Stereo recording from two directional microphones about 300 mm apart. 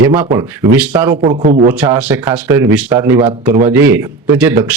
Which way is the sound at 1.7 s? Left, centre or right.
Centre.